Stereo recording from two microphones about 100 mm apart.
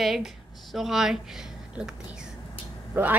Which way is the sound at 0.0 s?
Centre (ahead or behind).